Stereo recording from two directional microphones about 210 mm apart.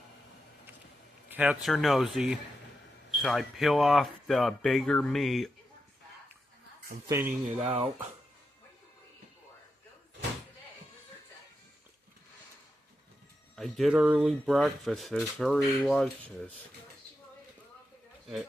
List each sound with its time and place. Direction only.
1.3 s speech: 5° right (ahead or behind)
7.1 s speech: 10° right (ahead or behind)
7.4 s speech: 25° right (ahead or behind)
13.6 s speech: centre (ahead or behind)